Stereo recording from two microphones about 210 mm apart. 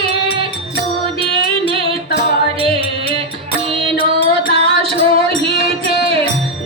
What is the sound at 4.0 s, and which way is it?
Music, 45° left (ahead or behind).